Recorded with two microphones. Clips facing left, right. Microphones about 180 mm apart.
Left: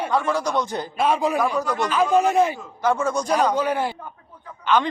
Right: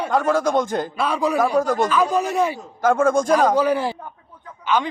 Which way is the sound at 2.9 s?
50° right (ahead or behind).